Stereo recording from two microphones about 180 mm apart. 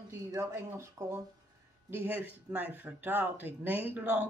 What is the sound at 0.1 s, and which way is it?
Speech, 15° right (ahead or behind).